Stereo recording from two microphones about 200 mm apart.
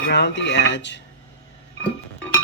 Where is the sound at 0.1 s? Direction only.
60° left (ahead or behind).